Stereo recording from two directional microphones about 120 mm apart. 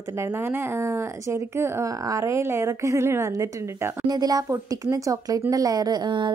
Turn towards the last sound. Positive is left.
turn(degrees=-40)  # may be behind; listen again after turning